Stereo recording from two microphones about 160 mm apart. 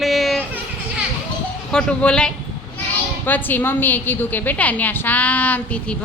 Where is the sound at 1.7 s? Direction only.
5° left (ahead or behind).